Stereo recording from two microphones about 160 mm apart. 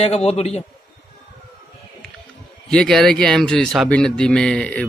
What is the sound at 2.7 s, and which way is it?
A man's voice, 5° left (ahead or behind).